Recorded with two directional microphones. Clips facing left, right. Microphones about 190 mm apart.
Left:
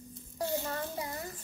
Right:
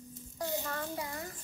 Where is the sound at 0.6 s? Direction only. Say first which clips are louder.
Left 2 dB; 20° left (ahead or behind).